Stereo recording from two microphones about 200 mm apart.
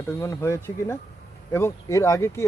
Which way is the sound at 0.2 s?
15° left (ahead or behind).